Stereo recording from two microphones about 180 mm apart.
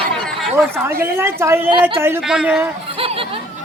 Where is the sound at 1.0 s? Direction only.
15° right (ahead or behind).